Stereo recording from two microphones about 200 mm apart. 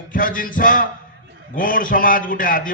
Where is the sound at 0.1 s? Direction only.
45° left (ahead or behind).